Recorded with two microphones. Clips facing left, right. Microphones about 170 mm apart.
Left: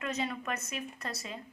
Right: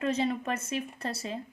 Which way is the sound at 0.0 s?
30° right (ahead or behind).